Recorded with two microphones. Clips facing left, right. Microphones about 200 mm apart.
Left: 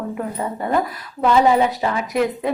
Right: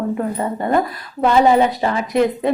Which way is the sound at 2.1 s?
30° right (ahead or behind).